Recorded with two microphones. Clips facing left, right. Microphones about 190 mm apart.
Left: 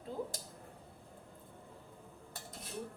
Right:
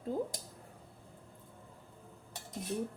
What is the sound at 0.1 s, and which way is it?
Speech, 45° right (ahead or behind).